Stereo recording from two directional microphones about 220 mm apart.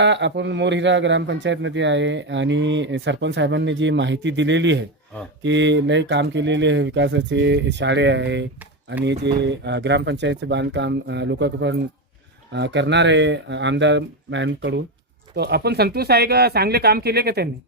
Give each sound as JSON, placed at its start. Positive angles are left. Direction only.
{"t": 0.0, "sound": "a man's voice", "side_deg": -55}